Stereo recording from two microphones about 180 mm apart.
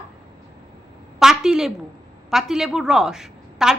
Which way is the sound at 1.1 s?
5° right (ahead or behind).